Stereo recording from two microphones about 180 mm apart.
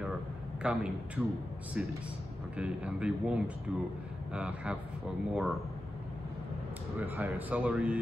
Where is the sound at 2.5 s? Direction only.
5° right (ahead or behind).